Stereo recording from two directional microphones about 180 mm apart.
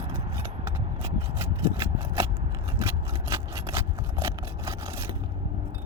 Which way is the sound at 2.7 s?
15° right (ahead or behind).